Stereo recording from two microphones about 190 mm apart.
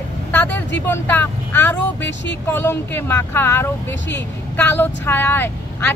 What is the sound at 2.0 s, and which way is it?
Speech, 70° left (ahead or behind).